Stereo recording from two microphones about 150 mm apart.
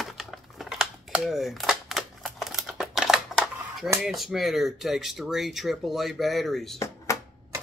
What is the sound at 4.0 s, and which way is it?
Speech, centre (ahead or behind).